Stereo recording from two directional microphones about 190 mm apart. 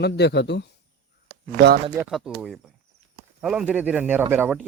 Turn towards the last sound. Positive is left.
turn(degrees=-10)  # may be behind; listen again after turning